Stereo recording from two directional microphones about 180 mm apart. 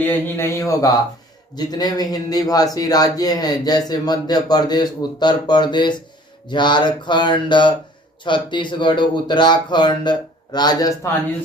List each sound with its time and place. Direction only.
0.1 s speech: 15° left (ahead or behind)